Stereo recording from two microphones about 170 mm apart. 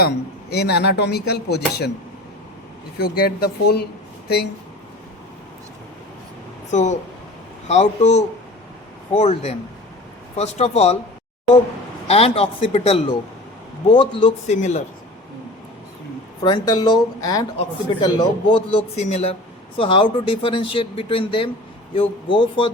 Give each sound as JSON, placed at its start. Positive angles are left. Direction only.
{"t": 0.5, "sound": "speech", "side_deg": 75}
{"t": 3.0, "sound": "speech", "side_deg": 65}
{"t": 6.7, "sound": "a man's voice", "side_deg": 45}
{"t": 12.0, "sound": "speech", "side_deg": 35}
{"t": 16.4, "sound": "speech", "side_deg": 25}
{"t": 18.5, "sound": "speech", "side_deg": 40}